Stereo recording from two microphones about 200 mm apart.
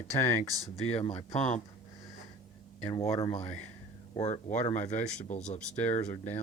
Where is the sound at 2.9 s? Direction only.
15° left (ahead or behind).